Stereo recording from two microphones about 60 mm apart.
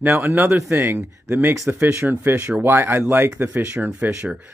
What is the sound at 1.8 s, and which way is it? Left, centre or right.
Speech, right.